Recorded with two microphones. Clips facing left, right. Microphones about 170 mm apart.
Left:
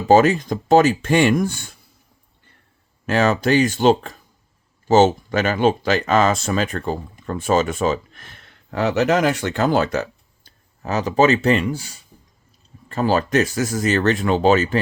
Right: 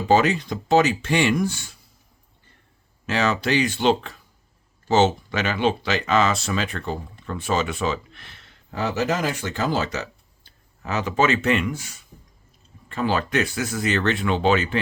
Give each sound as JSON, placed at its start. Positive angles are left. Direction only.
{"t": 0.1, "sound": "speech", "side_deg": 45}
{"t": 3.1, "sound": "speech", "side_deg": 50}